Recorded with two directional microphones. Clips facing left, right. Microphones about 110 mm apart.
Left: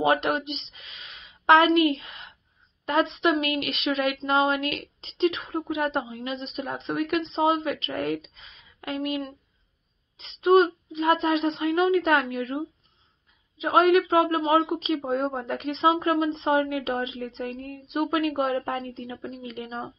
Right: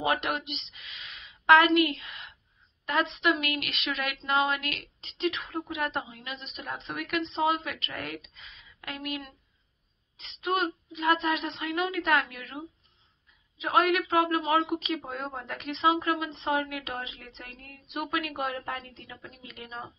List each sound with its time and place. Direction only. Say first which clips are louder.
0.0 s a woman's voice: left 6 dB; 30° left (ahead or behind)